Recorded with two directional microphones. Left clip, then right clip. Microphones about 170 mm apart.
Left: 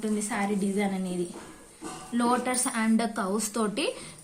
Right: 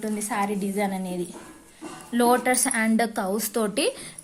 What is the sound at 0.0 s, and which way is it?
A woman's voice, 35° right (ahead or behind).